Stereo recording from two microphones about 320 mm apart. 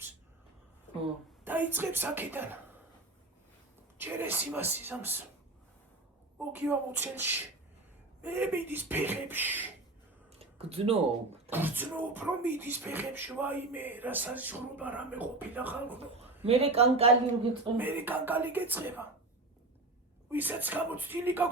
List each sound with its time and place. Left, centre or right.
1.5 s a woman's voice: centre
3.9 s speech: centre
6.5 s a woman's voice: centre
10.3 s a sound: centre
11.5 s speech: centre
16.0 s speech: centre
17.7 s speech: centre
20.3 s speech: centre